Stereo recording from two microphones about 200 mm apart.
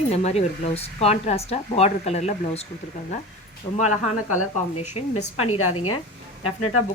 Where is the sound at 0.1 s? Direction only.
35° left (ahead or behind).